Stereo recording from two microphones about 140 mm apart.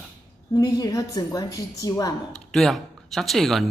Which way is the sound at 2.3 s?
Centre (ahead or behind).